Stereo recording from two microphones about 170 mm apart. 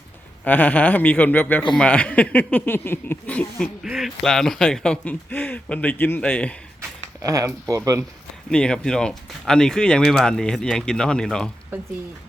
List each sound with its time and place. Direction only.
0.4 s speech: 10° left (ahead or behind)
7.2 s speech: 20° right (ahead or behind)
8.4 s speech: 5° left (ahead or behind)